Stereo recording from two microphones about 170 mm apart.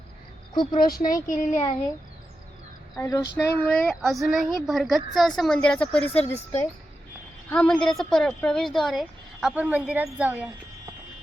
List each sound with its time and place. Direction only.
0.7 s speech: 60° left (ahead or behind)
3.0 s a woman's voice: 20° left (ahead or behind); by 10.5 s 10° right (ahead or behind)